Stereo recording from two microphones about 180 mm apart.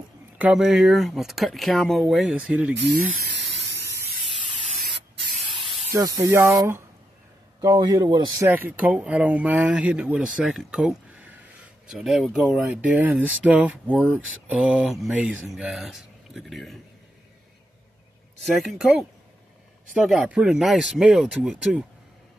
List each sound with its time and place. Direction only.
0.4 s speech: 5° right (ahead or behind)
3.0 s spray: 75° right (ahead or behind)
5.5 s spray: 30° right (ahead or behind)
5.9 s speech: 20° right (ahead or behind)
7.6 s speech: 20° right (ahead or behind); by 16.7 s centre (ahead or behind)
18.4 s speech: centre (ahead or behind)